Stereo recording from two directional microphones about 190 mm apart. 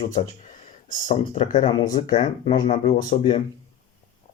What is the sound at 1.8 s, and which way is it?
Speech, 20° left (ahead or behind).